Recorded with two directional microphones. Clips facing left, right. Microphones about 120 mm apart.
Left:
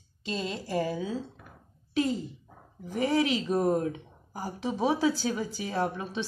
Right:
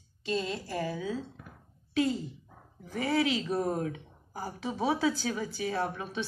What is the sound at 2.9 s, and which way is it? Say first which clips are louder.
A woman's voice: left 2 dB; 20° left (ahead or behind).